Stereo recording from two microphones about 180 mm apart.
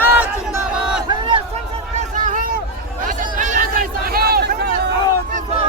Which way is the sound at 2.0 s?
45° right (ahead or behind).